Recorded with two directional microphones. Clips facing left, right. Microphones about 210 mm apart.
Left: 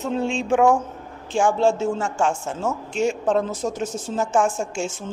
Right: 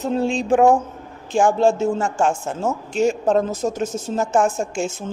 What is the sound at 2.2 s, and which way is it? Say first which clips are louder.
Speech: right 1 dB; 55° right (ahead or behind).